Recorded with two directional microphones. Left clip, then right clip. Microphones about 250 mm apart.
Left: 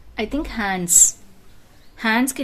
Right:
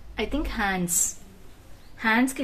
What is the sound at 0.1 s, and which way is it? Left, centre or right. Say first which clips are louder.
Speech: left 4 dB; left.